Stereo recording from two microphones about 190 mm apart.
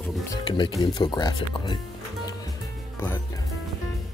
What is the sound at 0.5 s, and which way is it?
Speech, 25° left (ahead or behind).